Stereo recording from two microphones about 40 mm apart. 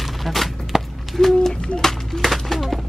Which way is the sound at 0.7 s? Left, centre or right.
Centre.